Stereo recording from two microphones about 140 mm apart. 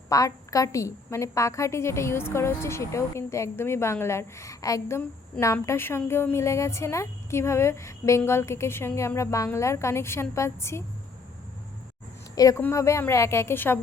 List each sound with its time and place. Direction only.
0.1 s a woman's voice: 25° left (ahead or behind)
12.4 s a woman's voice: 25° left (ahead or behind)